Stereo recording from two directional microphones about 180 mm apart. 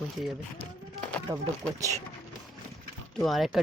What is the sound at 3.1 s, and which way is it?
Speech, centre (ahead or behind).